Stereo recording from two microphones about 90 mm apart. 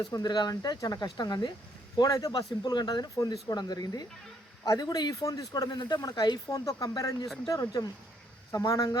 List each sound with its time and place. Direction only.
0.0 s speech: 50° left (ahead or behind)